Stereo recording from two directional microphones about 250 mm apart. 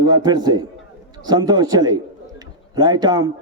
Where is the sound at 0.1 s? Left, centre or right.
Centre.